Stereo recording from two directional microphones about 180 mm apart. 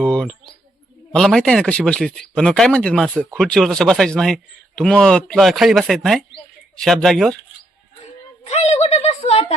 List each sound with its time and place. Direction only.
0.0 s speech: 5° left (ahead or behind)
8.4 s a woman's voice: 35° left (ahead or behind)